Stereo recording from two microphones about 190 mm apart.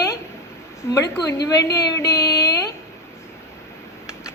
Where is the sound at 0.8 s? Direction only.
15° left (ahead or behind).